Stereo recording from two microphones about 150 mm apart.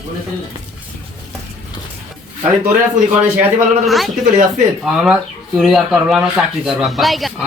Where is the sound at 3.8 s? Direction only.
Centre (ahead or behind).